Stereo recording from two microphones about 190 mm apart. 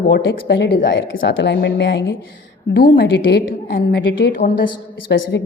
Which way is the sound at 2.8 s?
50° left (ahead or behind).